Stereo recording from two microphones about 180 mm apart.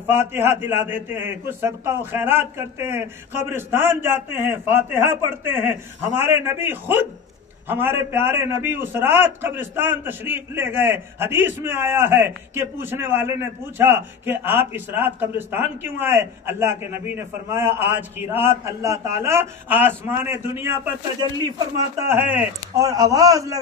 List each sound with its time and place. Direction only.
0.0 s a man's voice: 10° right (ahead or behind)